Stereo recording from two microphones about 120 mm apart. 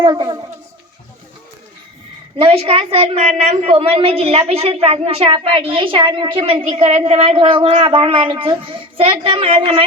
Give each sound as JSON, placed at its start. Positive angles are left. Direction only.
{"t": 0.0, "sound": "a child's voice", "side_deg": -35}
{"t": 2.4, "sound": "a woman's voice", "side_deg": -50}